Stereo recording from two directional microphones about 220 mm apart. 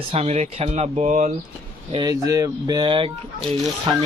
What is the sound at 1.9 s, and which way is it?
Speech, 20° right (ahead or behind).